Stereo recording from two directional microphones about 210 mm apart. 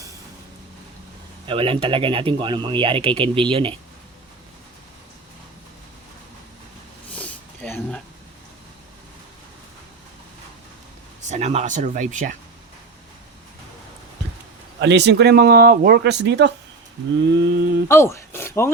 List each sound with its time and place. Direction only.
1.5 s speech: 25° right (ahead or behind)
7.1 s a sound: 5° left (ahead or behind)
11.3 s speech: 30° right (ahead or behind)
14.8 s speech: 55° right (ahead or behind)
17.8 s speech: 10° left (ahead or behind)